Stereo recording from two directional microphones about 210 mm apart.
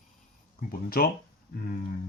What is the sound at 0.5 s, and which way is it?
Speech, 45° left (ahead or behind).